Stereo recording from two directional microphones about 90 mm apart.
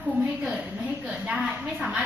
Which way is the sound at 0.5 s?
10° right (ahead or behind).